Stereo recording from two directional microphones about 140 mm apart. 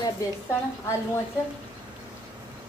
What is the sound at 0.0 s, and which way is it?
Speech, 20° left (ahead or behind).